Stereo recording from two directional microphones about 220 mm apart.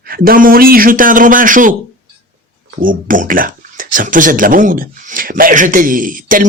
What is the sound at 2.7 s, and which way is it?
Speech, 40° right (ahead or behind).